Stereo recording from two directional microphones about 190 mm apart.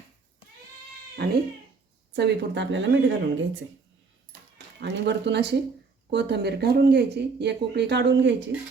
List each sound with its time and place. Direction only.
1.2 s speech: 55° right (ahead or behind); by 3.6 s 75° right (ahead or behind)
4.3 s a sound: 65° right (ahead or behind)
6.1 s speech: 65° right (ahead or behind)